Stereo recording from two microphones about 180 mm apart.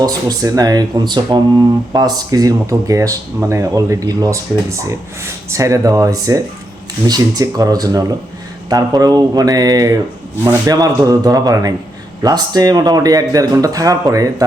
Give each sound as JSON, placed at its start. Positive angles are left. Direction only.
{"t": 0.0, "sound": "speech", "side_deg": -20}